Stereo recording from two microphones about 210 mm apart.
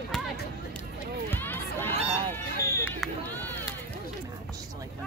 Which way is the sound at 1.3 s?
10° left (ahead or behind).